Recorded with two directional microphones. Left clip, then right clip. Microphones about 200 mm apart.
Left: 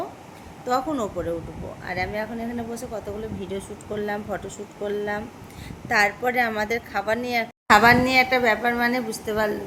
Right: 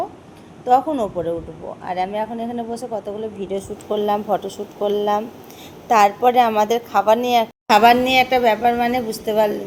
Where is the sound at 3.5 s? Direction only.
5° left (ahead or behind).